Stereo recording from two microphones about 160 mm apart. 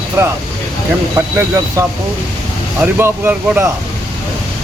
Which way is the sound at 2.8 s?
10° right (ahead or behind).